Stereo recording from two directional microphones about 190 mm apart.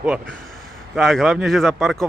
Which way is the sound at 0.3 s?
Centre (ahead or behind).